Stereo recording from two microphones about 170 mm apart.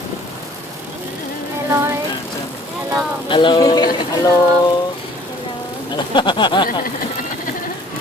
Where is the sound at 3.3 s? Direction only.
30° left (ahead or behind).